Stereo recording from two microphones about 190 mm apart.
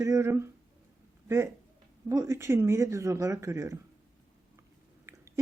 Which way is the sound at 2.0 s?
15° right (ahead or behind).